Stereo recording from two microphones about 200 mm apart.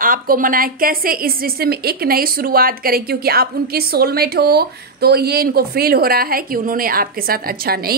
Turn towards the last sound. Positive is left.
turn(degrees=-50)  # may be behind; listen again after turning